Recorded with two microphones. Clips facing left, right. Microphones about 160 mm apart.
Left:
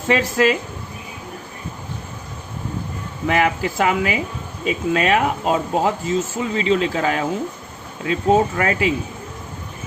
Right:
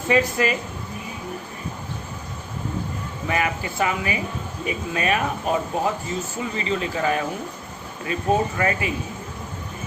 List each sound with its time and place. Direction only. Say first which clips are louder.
0.1 s speech: left 3 dB; 90° left
3.2 s speech: left 6 dB; 85° left